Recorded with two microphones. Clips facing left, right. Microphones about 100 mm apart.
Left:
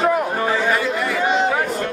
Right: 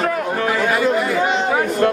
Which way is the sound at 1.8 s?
60° right (ahead or behind).